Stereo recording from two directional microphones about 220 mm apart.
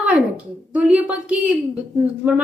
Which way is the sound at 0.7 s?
5° right (ahead or behind).